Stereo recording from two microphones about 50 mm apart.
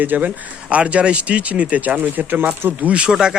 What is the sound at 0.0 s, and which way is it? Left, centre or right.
Speech, right.